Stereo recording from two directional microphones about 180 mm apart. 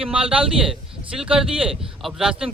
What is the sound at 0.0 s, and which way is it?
A man's voice, 5° right (ahead or behind).